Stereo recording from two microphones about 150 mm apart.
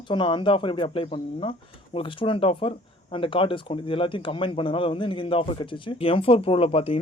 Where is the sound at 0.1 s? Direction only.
35° left (ahead or behind).